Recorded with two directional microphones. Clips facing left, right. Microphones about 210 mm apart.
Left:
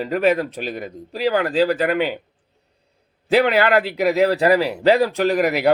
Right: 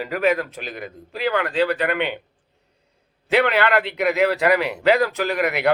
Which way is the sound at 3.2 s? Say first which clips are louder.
Left 3 dB; 35° left (ahead or behind).